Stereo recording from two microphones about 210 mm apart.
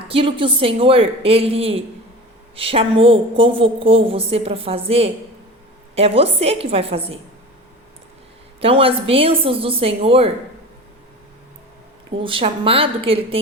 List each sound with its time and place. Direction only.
0.1 s a woman's voice: 25° right (ahead or behind)
8.6 s a woman's voice: 25° right (ahead or behind)
12.2 s a woman's voice: 25° right (ahead or behind)